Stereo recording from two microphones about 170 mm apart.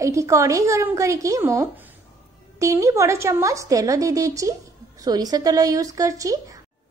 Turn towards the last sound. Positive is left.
turn(degrees=-20)  # may be behind; listen again after turning